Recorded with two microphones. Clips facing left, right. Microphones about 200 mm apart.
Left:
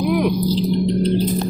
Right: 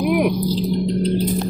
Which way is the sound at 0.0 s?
15° right (ahead or behind).